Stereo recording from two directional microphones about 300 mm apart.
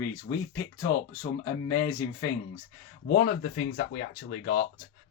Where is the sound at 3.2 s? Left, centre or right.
Left.